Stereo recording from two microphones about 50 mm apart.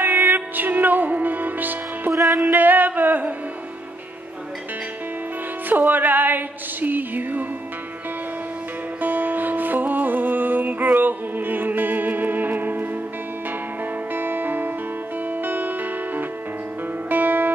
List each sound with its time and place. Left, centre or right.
0.0 s music: right
5.7 s music: right
9.0 s music: right
14.1 s music: right
17.1 s music: right